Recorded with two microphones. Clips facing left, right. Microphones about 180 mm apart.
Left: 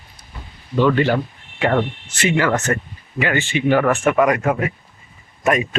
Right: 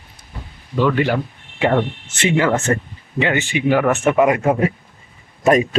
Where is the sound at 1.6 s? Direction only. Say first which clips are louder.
Right 1 dB; 20° right (ahead or behind).